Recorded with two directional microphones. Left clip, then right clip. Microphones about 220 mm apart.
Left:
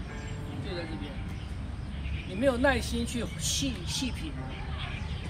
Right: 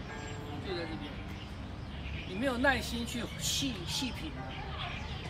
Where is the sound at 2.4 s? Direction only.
Centre (ahead or behind).